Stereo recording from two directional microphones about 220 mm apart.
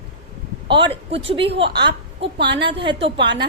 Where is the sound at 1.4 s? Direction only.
55° right (ahead or behind).